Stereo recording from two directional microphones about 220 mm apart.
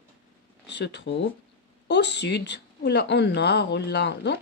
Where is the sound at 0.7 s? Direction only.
50° left (ahead or behind).